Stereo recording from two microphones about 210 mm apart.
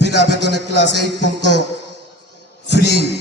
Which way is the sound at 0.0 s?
55° left (ahead or behind).